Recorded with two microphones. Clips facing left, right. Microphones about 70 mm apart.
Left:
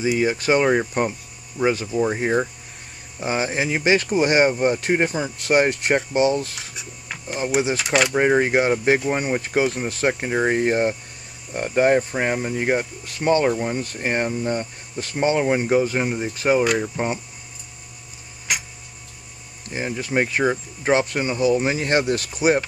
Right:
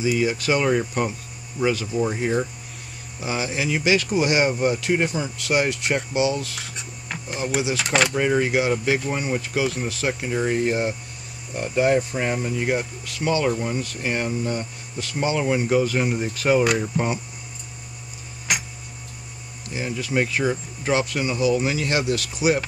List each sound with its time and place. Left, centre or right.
0.2 s speech: left
6.7 s speech: centre
8.1 s speech: left; by 17.1 s centre
18.5 s tick-tock: centre
19.7 s speech: left